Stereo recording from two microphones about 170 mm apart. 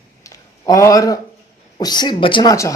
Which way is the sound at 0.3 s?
20° left (ahead or behind).